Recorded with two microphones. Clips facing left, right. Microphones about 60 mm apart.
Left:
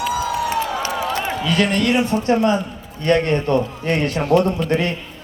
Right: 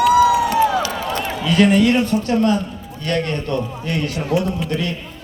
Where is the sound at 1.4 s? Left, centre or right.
Centre.